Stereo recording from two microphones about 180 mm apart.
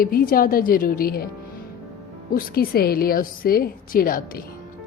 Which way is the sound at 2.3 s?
55° left (ahead or behind).